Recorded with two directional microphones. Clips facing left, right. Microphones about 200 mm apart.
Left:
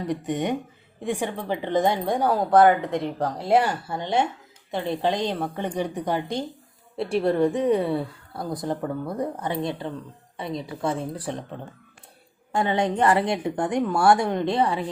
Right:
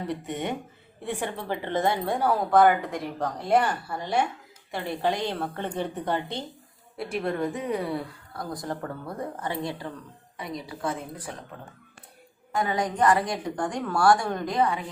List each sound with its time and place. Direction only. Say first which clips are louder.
0.1 s a woman's voice: left 7 dB; 15° left (ahead or behind)
6.9 s a woman's voice: left 7 dB; 30° left (ahead or behind)
12.5 s a woman's voice: left 4 dB; 30° left (ahead or behind)